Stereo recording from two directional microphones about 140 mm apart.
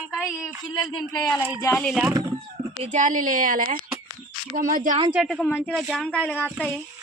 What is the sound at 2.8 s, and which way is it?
A woman's voice, 60° right (ahead or behind).